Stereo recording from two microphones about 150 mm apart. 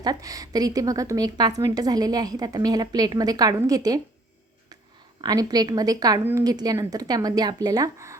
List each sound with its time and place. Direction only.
0.0 s a woman's voice: 25° right (ahead or behind)
5.2 s a woman's voice: 25° right (ahead or behind)